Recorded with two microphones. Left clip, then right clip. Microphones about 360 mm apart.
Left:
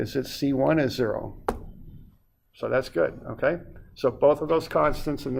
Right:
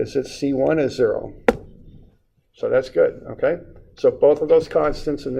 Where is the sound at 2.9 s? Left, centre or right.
Left.